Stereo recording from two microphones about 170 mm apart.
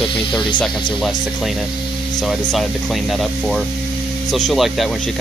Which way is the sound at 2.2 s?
Centre (ahead or behind).